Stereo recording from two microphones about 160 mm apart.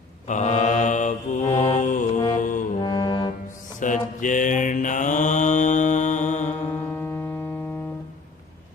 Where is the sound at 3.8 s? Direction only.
55° left (ahead or behind).